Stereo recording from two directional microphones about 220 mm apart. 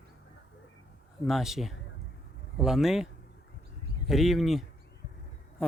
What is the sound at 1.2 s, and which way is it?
Speech, centre (ahead or behind).